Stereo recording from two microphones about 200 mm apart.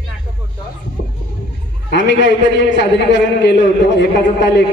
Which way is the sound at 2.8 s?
60° left (ahead or behind).